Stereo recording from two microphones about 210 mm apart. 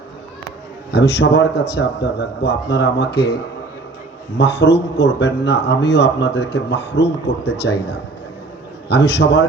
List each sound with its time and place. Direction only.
0.9 s a man's voice: 55° left (ahead or behind)
4.4 s a man's voice: 55° left (ahead or behind)
8.9 s a man's voice: 55° left (ahead or behind)